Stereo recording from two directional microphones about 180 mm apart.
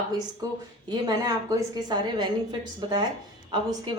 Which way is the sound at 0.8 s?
20° right (ahead or behind).